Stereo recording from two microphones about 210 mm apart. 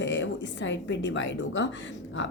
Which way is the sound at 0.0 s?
60° left (ahead or behind).